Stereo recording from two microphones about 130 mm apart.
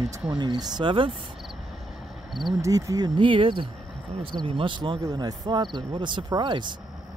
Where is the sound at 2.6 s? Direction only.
25° right (ahead or behind).